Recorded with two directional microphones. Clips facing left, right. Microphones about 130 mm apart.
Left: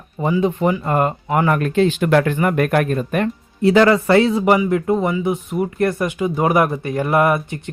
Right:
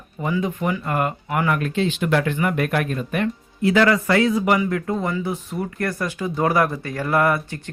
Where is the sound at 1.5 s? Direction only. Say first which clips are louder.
Left 6 dB; 50° left (ahead or behind).